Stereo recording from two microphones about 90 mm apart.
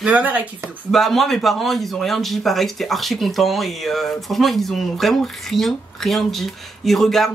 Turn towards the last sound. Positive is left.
turn(degrees=5)  # may be behind; listen again after turning